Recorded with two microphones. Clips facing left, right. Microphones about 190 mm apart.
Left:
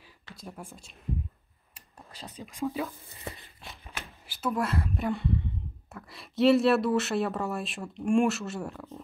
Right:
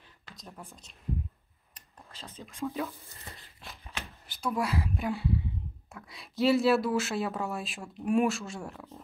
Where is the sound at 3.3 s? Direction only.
60° left (ahead or behind).